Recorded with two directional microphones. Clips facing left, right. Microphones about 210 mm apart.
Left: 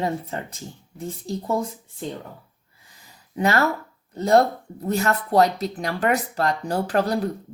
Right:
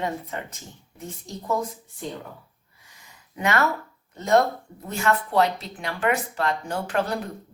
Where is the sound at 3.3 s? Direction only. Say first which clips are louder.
Left 3 dB; 35° left (ahead or behind).